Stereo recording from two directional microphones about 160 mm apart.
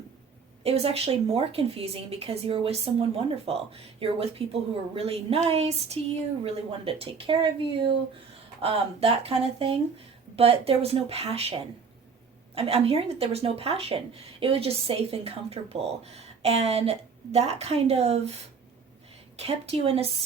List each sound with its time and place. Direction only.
0.6 s speech: 40° right (ahead or behind)
19.4 s speech: 40° right (ahead or behind)